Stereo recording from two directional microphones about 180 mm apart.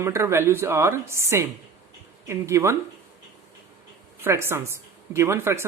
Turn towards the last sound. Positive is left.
turn(degrees=-15)  # may be behind; listen again after turning